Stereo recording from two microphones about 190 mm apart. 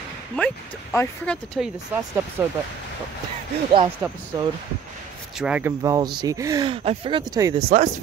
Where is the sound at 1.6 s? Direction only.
5° right (ahead or behind).